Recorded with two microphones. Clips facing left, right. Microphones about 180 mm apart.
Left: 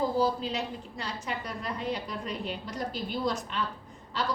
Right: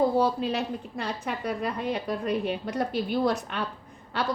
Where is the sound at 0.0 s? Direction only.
60° right (ahead or behind).